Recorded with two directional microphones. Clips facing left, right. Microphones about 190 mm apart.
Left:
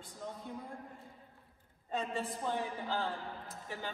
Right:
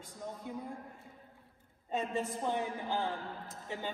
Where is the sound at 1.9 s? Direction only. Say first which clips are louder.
Right 2 dB; 20° right (ahead or behind).